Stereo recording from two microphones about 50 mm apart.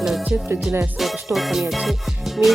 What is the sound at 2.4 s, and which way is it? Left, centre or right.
Speech, right.